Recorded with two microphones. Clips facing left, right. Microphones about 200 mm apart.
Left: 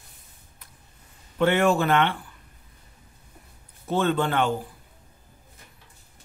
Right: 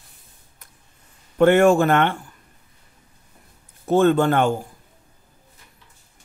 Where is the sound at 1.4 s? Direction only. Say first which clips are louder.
Right 7 dB; 50° right (ahead or behind).